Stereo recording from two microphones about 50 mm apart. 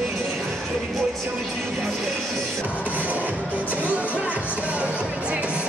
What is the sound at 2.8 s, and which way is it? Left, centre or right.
Music, right.